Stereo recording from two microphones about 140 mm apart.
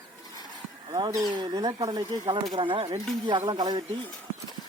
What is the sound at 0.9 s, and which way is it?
Speech, 25° right (ahead or behind).